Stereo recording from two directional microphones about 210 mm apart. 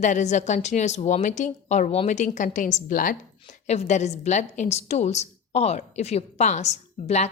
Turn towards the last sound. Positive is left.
turn(degrees=30)  # may be behind; listen again after turning